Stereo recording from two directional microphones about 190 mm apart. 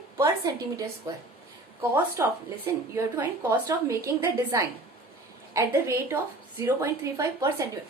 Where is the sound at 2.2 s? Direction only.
15° right (ahead or behind).